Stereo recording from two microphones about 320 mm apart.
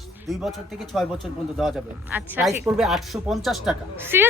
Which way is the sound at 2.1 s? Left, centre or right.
Centre.